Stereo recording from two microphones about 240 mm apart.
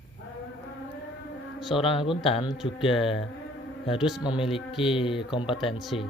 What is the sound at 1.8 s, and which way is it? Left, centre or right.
Speech, left.